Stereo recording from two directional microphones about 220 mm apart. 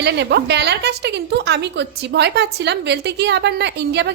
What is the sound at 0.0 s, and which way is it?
A woman's voice, 50° right (ahead or behind).